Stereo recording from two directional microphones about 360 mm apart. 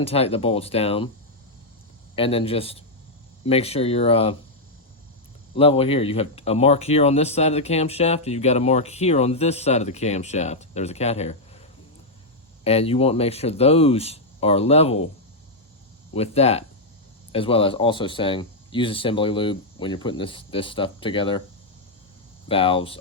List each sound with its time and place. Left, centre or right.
0.0 s speech: centre
2.1 s speech: centre
5.5 s speech: centre
12.6 s speech: centre
16.1 s speech: centre
22.4 s speech: centre